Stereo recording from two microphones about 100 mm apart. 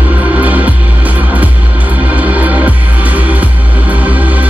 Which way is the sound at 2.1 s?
15° right (ahead or behind).